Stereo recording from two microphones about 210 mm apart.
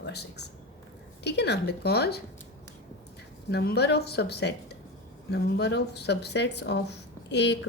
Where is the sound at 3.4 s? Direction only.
50° left (ahead or behind).